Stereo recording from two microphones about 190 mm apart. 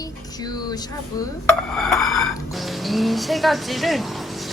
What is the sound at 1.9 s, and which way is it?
Speech, centre (ahead or behind).